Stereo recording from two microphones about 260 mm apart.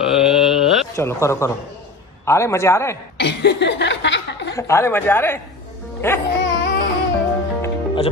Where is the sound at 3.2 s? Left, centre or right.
Left.